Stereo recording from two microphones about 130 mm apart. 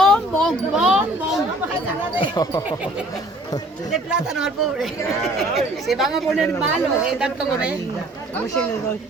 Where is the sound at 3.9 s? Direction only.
5° right (ahead or behind).